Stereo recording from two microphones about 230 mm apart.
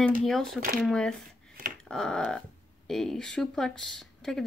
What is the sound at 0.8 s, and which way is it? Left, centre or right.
Speech, centre.